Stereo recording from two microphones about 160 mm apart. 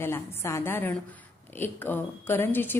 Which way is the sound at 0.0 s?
15° left (ahead or behind).